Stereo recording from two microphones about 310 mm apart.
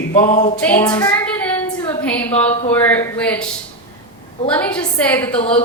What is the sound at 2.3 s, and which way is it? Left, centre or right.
Speech, left.